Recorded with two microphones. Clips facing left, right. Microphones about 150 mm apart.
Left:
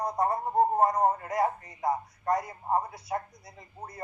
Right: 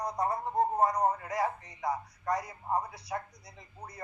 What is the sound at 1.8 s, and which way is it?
Speech, 30° left (ahead or behind).